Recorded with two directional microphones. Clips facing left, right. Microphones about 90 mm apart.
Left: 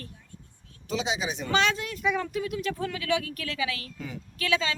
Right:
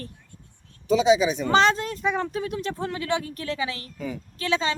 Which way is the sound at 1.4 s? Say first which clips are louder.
Right 5 dB; 35° right (ahead or behind).